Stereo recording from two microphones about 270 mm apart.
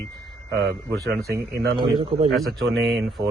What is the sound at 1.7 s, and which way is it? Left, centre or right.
Speech, centre.